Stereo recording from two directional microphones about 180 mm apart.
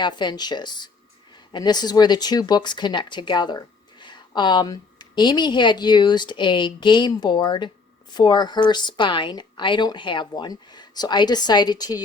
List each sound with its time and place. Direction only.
0.0 s a woman's voice: 25° left (ahead or behind)